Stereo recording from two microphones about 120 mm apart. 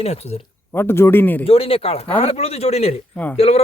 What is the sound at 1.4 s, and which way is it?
Speech, 50° left (ahead or behind).